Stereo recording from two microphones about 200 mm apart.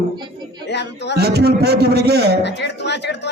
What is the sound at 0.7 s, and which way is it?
Speech, 60° left (ahead or behind).